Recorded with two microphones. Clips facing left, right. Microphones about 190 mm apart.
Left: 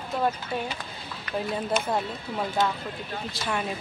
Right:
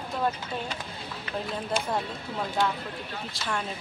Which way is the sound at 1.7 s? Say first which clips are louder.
Even; 30° right (ahead or behind).